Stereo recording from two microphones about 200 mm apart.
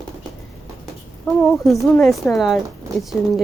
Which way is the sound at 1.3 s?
5° left (ahead or behind).